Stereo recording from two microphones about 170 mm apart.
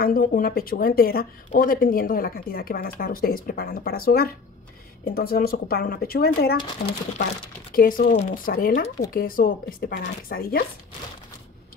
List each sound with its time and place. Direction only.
0.0 s speech: 60° left (ahead or behind)
6.8 s speech: 45° left (ahead or behind)
7.7 s speech: 55° left (ahead or behind)